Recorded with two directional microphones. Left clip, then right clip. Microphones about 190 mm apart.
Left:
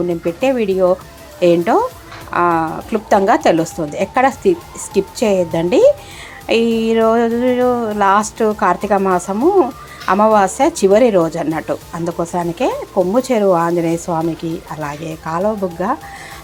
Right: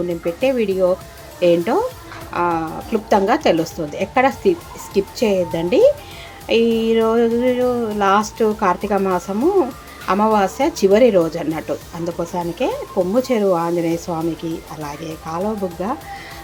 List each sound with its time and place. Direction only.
0.1 s speech: 5° left (ahead or behind)